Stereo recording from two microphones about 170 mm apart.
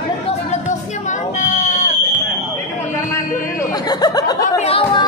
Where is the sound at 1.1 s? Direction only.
45° left (ahead or behind).